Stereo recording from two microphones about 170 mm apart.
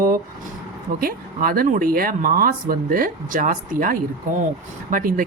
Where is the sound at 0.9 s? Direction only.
60° right (ahead or behind).